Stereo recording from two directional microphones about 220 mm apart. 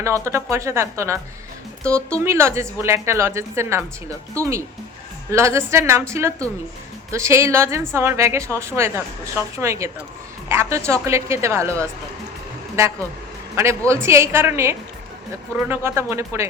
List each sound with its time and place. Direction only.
0.0 s a woman's voice: 15° right (ahead or behind)
2.2 s a woman's voice: 10° right (ahead or behind)
13.6 s a woman's voice: 10° right (ahead or behind)